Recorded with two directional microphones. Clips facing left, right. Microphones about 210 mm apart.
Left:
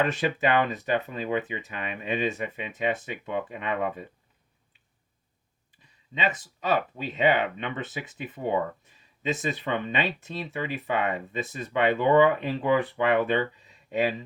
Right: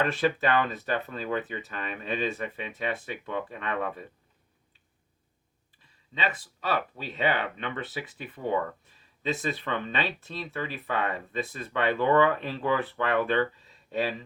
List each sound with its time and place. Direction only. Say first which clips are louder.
0.2 s speech: left 1 dB; 15° left (ahead or behind)
6.1 s speech: left 3 dB; 20° left (ahead or behind)